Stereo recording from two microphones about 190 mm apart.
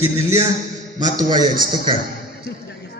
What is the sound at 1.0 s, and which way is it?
Speech, 20° right (ahead or behind).